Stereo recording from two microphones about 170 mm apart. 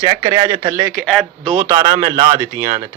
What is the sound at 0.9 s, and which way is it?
Speech, centre (ahead or behind).